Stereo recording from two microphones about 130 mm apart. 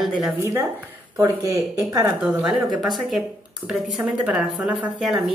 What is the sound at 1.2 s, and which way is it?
Speech, 25° right (ahead or behind).